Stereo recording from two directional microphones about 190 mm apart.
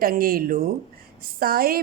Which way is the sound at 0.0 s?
50° right (ahead or behind).